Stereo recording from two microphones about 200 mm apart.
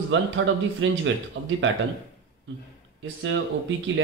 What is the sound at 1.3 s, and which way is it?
Speech, 60° right (ahead or behind).